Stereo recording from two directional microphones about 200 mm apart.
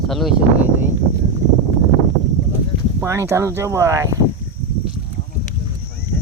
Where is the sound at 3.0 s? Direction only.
15° right (ahead or behind).